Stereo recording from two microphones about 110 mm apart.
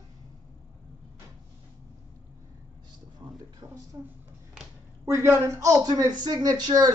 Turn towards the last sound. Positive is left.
turn(degrees=-35)  # may be behind; listen again after turning